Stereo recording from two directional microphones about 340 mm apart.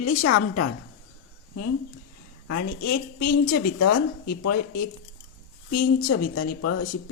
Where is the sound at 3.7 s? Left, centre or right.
Left.